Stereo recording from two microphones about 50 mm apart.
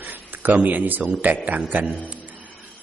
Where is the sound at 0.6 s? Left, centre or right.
Right.